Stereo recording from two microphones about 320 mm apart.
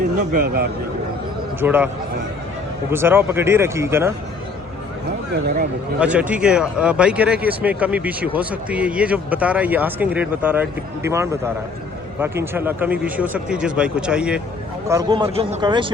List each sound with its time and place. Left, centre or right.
0.2 s speech: right
1.6 s speech: centre
2.9 s speech: centre
6.0 s speech: centre